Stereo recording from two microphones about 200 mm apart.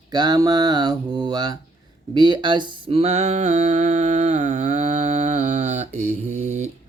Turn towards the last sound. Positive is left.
turn(degrees=-35)  # may be behind; listen again after turning